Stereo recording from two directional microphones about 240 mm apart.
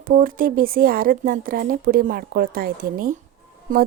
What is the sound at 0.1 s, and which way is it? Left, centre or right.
Speech, right.